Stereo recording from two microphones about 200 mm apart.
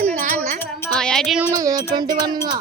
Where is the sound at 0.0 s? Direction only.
40° right (ahead or behind).